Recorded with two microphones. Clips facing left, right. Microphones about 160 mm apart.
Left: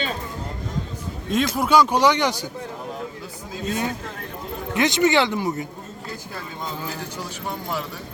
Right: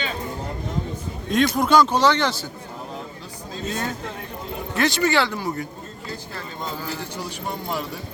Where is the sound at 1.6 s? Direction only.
10° left (ahead or behind).